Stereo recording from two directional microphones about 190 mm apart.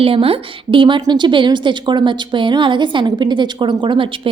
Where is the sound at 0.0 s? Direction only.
30° right (ahead or behind).